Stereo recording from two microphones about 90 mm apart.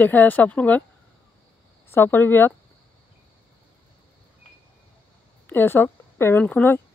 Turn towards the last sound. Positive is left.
turn(degrees=20)  # may be behind; listen again after turning